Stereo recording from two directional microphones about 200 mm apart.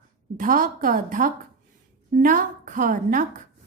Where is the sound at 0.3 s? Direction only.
45° right (ahead or behind).